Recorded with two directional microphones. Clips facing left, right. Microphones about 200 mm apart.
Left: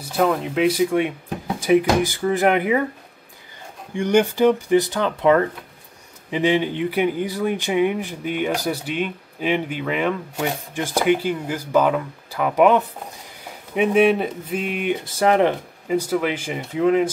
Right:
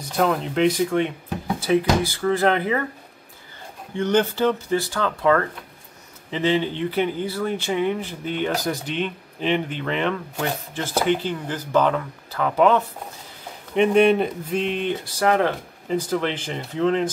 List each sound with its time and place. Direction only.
0.1 s speech: 5° left (ahead or behind)
3.9 s speech: 10° left (ahead or behind)
13.7 s speech: 5° left (ahead or behind)
15.0 s speech: 20° left (ahead or behind)